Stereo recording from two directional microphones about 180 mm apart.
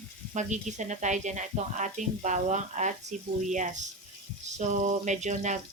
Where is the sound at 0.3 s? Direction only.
40° right (ahead or behind).